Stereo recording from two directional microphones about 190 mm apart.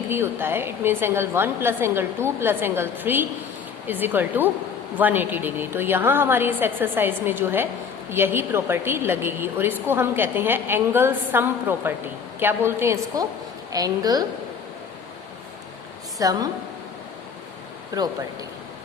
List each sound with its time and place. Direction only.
0.1 s a woman's voice: 10° right (ahead or behind)
16.1 s a woman's voice: 20° right (ahead or behind)
17.9 s a woman's voice: 20° right (ahead or behind)